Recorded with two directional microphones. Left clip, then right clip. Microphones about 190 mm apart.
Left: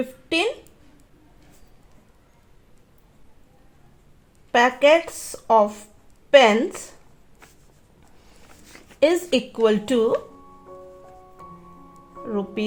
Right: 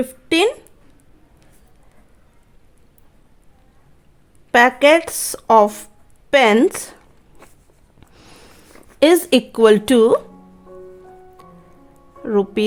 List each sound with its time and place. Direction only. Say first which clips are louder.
0.0 s speech: right 6 dB; 50° right (ahead or behind)
4.5 s speech: right 4 dB; 45° right (ahead or behind)
9.0 s speech: right 6 dB; 50° right (ahead or behind)
12.2 s speech: right 9 dB; 50° right (ahead or behind)